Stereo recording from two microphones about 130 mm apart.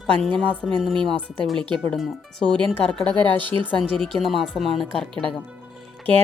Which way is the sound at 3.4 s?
40° right (ahead or behind).